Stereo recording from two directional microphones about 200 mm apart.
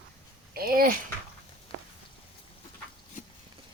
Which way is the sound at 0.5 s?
45° right (ahead or behind).